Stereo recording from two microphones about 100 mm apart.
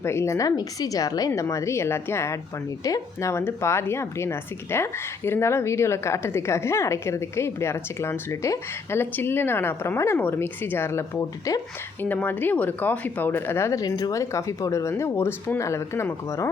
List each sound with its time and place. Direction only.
0.0 s a woman's voice: 25° left (ahead or behind)
11.9 s speech: 15° left (ahead or behind); by 14.2 s 40° left (ahead or behind)
14.2 s speech: 30° left (ahead or behind)